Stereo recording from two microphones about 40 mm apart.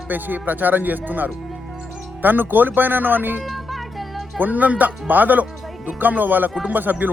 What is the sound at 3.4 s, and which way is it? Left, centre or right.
Music, centre.